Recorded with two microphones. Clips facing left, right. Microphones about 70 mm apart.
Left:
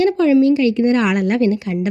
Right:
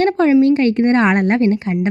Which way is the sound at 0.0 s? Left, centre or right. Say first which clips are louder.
Even; right.